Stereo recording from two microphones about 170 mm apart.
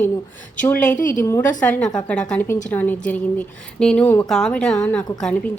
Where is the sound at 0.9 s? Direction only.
50° left (ahead or behind).